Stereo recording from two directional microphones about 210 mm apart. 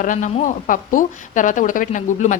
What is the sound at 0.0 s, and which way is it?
A woman's voice, 35° left (ahead or behind).